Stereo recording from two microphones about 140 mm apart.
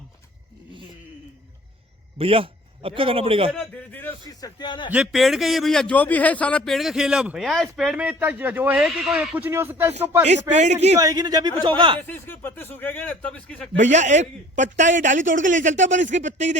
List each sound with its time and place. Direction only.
2.1 s a man's voice: 40° right (ahead or behind)
3.5 s a man's voice: 10° left (ahead or behind)
4.3 s a man's voice: 25° left (ahead or behind)
4.9 s speech: 5° right (ahead or behind)
10.5 s a man's voice: 55° right (ahead or behind)
11.0 s speech: 25° right (ahead or behind)
11.9 s a man's voice: 15° left (ahead or behind)
13.7 s a man's voice: 60° right (ahead or behind)